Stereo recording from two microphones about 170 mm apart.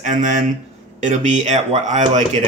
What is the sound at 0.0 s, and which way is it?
Speech, 45° right (ahead or behind).